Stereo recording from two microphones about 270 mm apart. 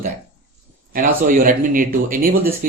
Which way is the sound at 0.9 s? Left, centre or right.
Right.